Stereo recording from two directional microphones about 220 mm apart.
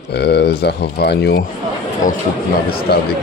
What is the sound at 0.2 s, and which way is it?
Speech, 50° left (ahead or behind).